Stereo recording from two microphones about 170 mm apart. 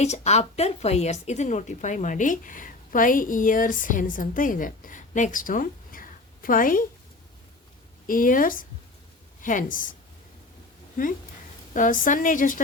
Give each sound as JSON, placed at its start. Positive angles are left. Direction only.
{"t": 0.0, "sound": "a woman's voice", "side_deg": 40}
{"t": 8.0, "sound": "a woman's voice", "side_deg": 55}
{"t": 11.7, "sound": "a woman's voice", "side_deg": 50}